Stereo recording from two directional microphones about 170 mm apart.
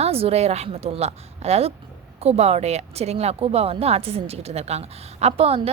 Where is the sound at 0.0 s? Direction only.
35° right (ahead or behind).